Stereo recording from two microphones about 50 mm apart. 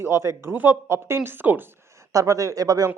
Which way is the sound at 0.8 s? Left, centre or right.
Right.